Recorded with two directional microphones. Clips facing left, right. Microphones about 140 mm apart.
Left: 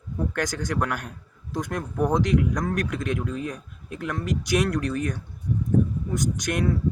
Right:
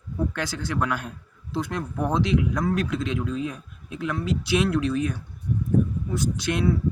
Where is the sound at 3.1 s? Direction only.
50° left (ahead or behind).